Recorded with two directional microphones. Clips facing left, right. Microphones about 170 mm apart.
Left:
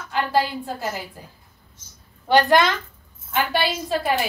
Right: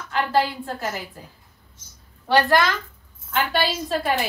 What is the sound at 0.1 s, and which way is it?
Speech, 10° left (ahead or behind).